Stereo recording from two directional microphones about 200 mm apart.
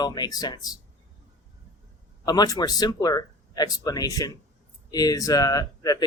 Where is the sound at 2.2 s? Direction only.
20° left (ahead or behind).